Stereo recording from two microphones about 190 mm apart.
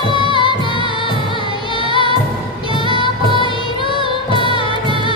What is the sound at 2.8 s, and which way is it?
Music, 25° right (ahead or behind).